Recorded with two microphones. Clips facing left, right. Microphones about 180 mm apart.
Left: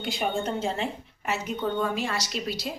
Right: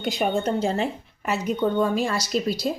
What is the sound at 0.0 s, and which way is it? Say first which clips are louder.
A woman's voice: right 5 dB; 40° right (ahead or behind).